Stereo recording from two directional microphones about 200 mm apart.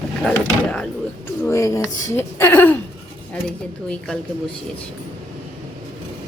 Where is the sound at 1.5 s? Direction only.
15° left (ahead or behind).